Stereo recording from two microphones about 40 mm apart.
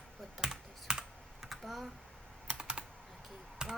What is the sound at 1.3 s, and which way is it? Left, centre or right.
Computer keyboard, centre.